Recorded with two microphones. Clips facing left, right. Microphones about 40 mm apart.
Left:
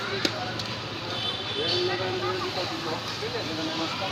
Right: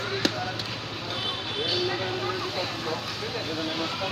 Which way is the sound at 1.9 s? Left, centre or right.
Centre.